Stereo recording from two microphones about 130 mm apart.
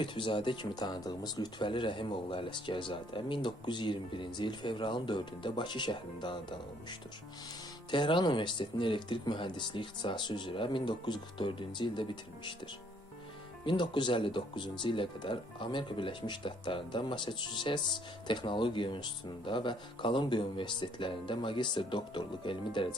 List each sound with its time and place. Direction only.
0.0 s speech: 40° left (ahead or behind)
7.9 s speech: 40° left (ahead or behind)
13.7 s speech: 35° left (ahead or behind)